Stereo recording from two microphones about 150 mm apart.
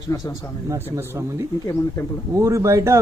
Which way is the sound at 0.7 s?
20° right (ahead or behind).